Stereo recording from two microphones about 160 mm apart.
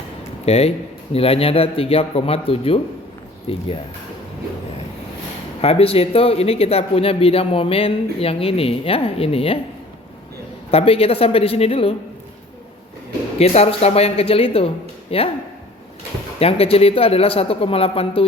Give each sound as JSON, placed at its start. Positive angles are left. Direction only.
{"t": 0.4, "sound": "a man's voice", "side_deg": 40}
{"t": 5.6, "sound": "a man's voice", "side_deg": 35}
{"t": 10.7, "sound": "a man's voice", "side_deg": 40}
{"t": 13.4, "sound": "a man's voice", "side_deg": 40}
{"t": 16.4, "sound": "a man's voice", "side_deg": 40}